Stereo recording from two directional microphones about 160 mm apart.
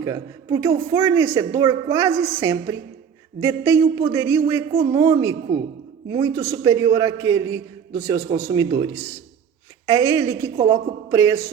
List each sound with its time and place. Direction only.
0.0 s a man's voice: 20° right (ahead or behind)